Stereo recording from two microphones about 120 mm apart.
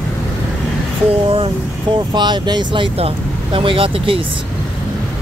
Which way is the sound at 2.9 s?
50° right (ahead or behind).